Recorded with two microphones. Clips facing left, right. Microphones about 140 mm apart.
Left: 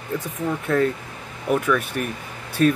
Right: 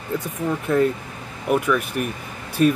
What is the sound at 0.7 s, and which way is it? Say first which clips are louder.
Speech: right 2 dB; 15° right (ahead or behind).